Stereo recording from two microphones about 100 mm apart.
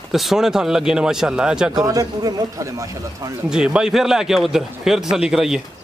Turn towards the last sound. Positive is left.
turn(degrees=-5)  # may be behind; listen again after turning